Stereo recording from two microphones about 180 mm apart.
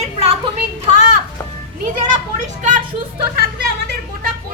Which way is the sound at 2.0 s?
40° right (ahead or behind).